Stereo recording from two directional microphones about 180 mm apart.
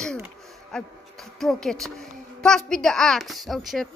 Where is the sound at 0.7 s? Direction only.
Centre (ahead or behind).